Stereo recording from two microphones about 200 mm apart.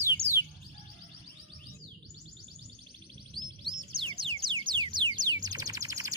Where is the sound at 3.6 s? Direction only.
25° right (ahead or behind).